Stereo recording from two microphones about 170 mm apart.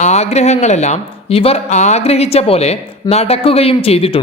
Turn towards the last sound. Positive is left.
turn(degrees=35)  # may be behind; listen again after turning